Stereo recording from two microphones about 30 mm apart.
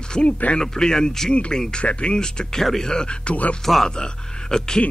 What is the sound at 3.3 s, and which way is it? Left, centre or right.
Speech, left.